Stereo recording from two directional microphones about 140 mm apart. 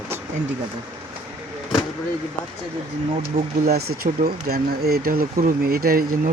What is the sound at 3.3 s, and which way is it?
Speech, 90° right.